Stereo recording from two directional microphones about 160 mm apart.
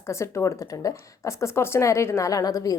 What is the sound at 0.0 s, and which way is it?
A woman's voice, 15° left (ahead or behind).